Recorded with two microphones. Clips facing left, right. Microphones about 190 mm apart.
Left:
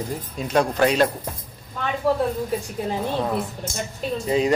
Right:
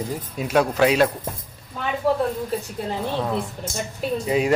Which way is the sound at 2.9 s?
15° left (ahead or behind).